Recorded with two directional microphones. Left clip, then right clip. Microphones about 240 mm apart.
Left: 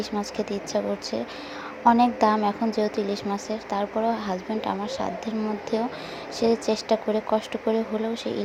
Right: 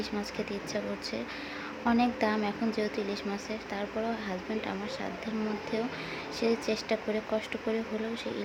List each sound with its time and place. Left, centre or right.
0.2 s speech: centre